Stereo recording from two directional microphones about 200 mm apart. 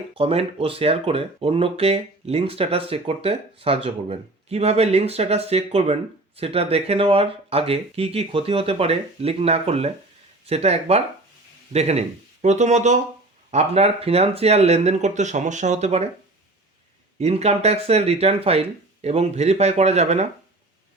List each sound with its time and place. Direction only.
0.1 s speech: 30° right (ahead or behind)
17.2 s speech: 30° right (ahead or behind)